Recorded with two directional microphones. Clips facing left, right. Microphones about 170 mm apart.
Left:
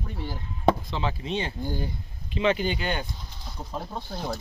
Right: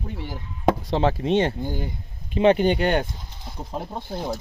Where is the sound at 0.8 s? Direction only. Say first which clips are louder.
Right 9 dB; 70° right (ahead or behind); by 1.5 s 50° right (ahead or behind).